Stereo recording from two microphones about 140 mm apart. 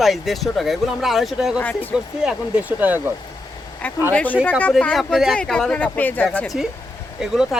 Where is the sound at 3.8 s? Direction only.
10° left (ahead or behind).